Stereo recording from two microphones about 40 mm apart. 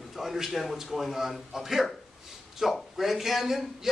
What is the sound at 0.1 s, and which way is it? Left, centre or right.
A man's voice, centre.